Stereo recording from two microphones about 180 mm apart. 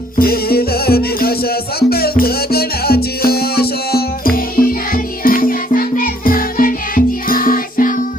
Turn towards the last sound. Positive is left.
turn(degrees=50)  # may be behind; listen again after turning